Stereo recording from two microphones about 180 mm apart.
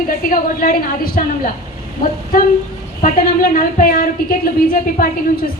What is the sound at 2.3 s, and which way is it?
A woman's voice, 50° left (ahead or behind).